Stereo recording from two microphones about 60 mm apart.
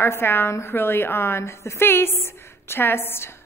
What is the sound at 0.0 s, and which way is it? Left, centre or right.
A woman's voice, left.